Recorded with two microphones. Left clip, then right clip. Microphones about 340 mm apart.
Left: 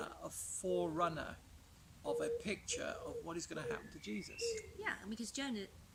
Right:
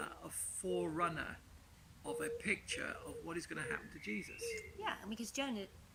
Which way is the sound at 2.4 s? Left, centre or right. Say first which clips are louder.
Right 2 dB; centre.